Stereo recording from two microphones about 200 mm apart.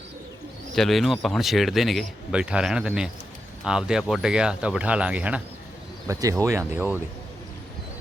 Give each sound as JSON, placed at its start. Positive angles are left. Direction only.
{"t": 0.8, "sound": "a man's voice", "side_deg": 0}
{"t": 6.1, "sound": "speech", "side_deg": -15}